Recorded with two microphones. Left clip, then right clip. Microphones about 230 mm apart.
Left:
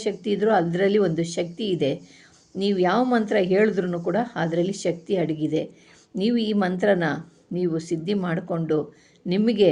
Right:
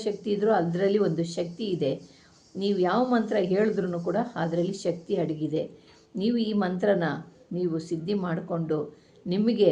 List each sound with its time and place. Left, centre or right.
0.0 s speech: left